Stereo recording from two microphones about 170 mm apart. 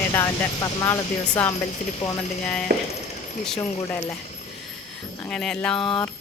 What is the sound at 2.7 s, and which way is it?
Speech, 65° right (ahead or behind).